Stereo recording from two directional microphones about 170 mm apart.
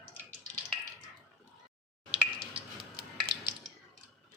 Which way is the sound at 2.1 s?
30° right (ahead or behind).